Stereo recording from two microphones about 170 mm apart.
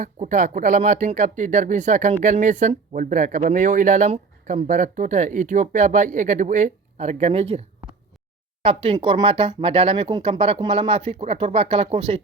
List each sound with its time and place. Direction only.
0.0 s speech: 45° right (ahead or behind)
8.6 s speech: 35° right (ahead or behind)